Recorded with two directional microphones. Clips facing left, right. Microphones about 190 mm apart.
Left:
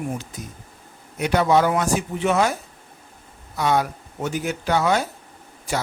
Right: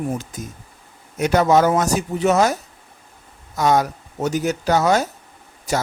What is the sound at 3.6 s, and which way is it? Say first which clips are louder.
A man's voice: right 3 dB; 40° right (ahead or behind).